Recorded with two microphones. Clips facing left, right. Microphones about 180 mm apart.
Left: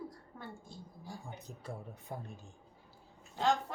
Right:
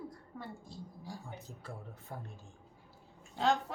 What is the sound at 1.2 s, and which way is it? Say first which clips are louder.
Speech: left 1 dB; 20° left (ahead or behind).